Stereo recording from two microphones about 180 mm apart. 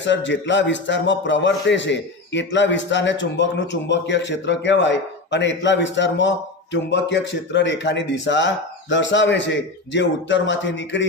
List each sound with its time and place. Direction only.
0.0 s a man's voice: 90° left